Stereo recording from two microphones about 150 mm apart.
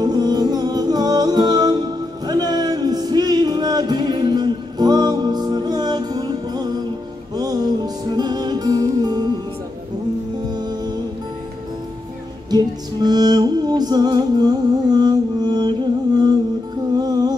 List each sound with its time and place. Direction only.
0.0 s music: 25° right (ahead or behind)
10.5 s music: 30° right (ahead or behind)
12.4 s music: 25° right (ahead or behind)
16.9 s music: 25° right (ahead or behind)